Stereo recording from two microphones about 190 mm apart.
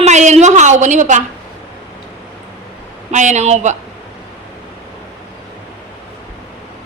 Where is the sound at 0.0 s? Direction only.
40° right (ahead or behind).